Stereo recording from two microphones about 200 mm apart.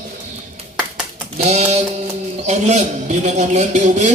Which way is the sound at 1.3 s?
35° right (ahead or behind).